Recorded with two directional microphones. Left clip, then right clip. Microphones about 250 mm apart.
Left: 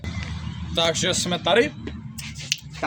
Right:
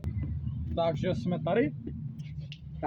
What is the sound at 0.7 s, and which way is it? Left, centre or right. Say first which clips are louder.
Speech: left 8 dB; centre.